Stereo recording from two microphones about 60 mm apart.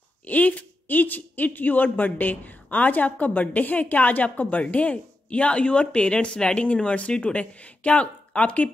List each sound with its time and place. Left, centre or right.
0.3 s a woman's voice: left